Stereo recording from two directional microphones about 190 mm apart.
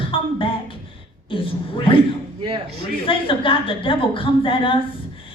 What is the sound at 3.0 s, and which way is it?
A woman's voice, 25° left (ahead or behind).